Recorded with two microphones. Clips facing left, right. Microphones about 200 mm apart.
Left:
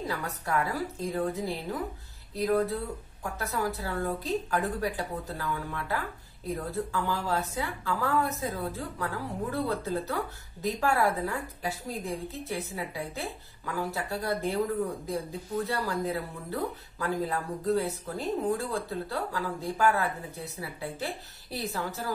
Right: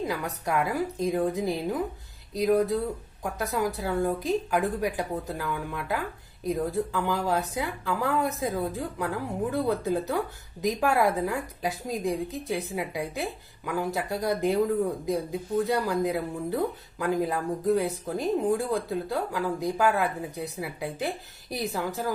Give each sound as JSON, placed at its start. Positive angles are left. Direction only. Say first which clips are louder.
{"t": 0.0, "sound": "a woman's voice", "louder": "right 4 dB", "side_deg": -15}